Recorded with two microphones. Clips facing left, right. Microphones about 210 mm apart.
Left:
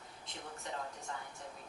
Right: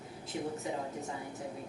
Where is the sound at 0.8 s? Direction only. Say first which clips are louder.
Right 6 dB; 15° right (ahead or behind).